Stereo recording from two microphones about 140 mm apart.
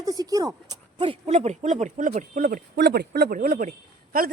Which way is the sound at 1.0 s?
45° right (ahead or behind).